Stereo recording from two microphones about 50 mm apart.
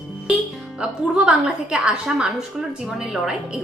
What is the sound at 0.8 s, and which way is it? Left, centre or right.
A woman's voice, centre.